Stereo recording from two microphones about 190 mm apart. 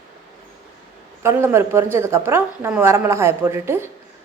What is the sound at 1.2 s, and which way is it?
A woman's voice, 10° right (ahead or behind).